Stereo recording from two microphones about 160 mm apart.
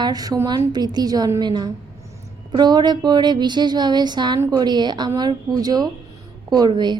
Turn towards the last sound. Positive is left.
turn(degrees=-25)  # may be behind; listen again after turning